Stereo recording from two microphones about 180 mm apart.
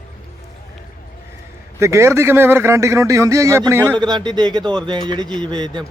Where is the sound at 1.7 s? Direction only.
15° right (ahead or behind).